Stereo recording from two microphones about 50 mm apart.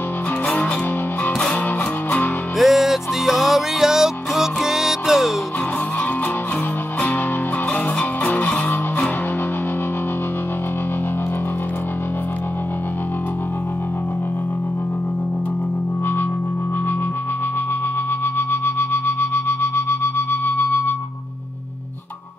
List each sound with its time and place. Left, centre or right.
2.6 s music: centre
7.7 s music: left
18.5 s music: left